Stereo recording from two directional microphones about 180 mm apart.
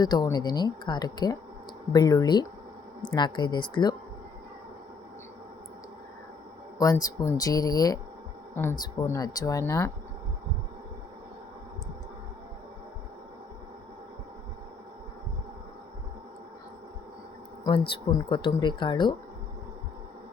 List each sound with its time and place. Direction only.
0.0 s speech: 20° left (ahead or behind)
6.7 s speech: 20° left (ahead or behind)
17.6 s speech: 25° left (ahead or behind)